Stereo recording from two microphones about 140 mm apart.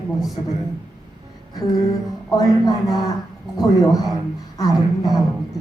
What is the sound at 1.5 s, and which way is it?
Speech, 30° left (ahead or behind).